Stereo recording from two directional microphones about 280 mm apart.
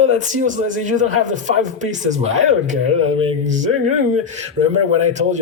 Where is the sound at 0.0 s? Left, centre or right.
Right.